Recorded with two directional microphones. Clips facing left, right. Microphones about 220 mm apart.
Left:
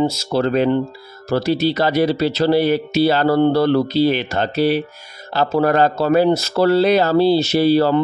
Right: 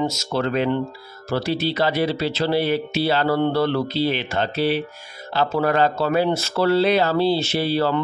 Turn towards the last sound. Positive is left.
turn(degrees=40)  # may be behind; listen again after turning